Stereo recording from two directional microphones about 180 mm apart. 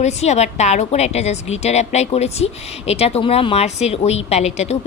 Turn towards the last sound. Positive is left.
turn(degrees=35)  # may be behind; listen again after turning